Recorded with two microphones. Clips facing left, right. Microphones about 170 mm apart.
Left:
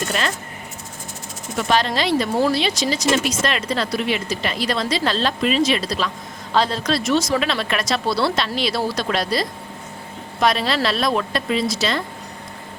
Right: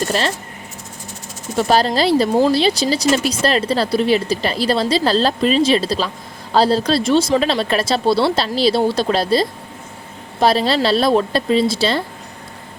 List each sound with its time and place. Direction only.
0.1 s speech: 30° right (ahead or behind)
1.5 s speech: 35° right (ahead or behind)